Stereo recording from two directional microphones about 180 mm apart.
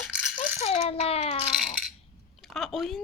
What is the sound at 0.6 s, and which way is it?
A child's voice, 35° left (ahead or behind).